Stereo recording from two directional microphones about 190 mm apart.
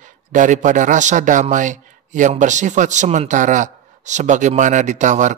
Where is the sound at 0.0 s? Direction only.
40° right (ahead or behind).